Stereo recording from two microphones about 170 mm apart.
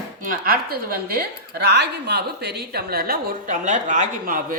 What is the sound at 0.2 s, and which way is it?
A woman's voice, 55° right (ahead or behind).